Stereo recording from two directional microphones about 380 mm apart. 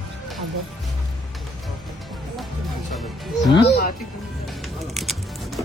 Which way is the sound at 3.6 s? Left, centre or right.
Left.